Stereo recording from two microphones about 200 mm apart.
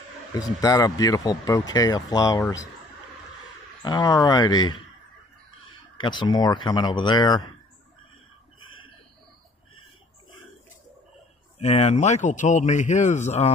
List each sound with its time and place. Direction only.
0.4 s speech: 15° left (ahead or behind)
3.8 s speech: 20° left (ahead or behind)
5.9 s speech: 20° left (ahead or behind)
11.5 s a man's voice: 35° left (ahead or behind)